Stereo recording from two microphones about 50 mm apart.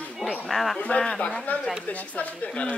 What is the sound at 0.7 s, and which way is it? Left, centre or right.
Speech, left.